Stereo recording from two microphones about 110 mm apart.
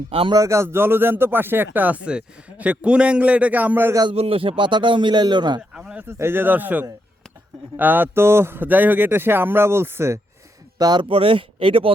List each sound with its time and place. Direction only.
0.1 s speech: 55° right (ahead or behind)
0.3 s speech: 30° right (ahead or behind)
4.1 s speech: 65° right (ahead or behind); by 5.5 s 40° right (ahead or behind)
5.7 s a sound: 10° right (ahead or behind)
6.1 s speech: 20° right (ahead or behind)
10.8 s speech: 40° right (ahead or behind)
11.1 s speech: 55° right (ahead or behind)